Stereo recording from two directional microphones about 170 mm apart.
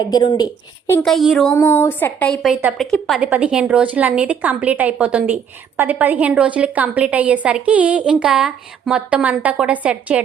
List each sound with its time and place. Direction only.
0.0 s a woman's voice: 25° left (ahead or behind)
1.0 s speech: centre (ahead or behind)
1.5 s a woman's voice: 15° left (ahead or behind); by 10.2 s 5° right (ahead or behind)